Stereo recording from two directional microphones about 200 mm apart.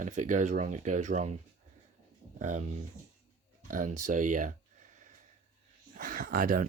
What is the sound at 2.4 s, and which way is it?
Speech, 35° right (ahead or behind).